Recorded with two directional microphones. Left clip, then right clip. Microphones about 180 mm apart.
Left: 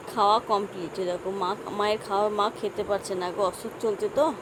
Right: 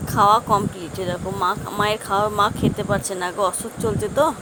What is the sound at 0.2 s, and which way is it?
Speech, 20° right (ahead or behind).